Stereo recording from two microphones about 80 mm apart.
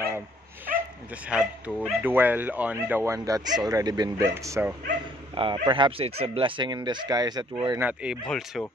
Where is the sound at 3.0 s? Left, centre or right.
Right.